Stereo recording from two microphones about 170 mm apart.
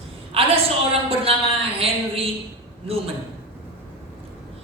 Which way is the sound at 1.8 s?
35° right (ahead or behind).